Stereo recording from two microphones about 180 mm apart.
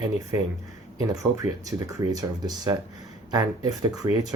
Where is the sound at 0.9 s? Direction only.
20° right (ahead or behind).